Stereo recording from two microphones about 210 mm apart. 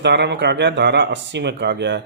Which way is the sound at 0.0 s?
55° right (ahead or behind).